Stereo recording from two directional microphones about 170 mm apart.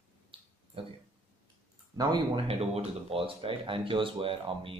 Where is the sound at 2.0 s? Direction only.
30° right (ahead or behind).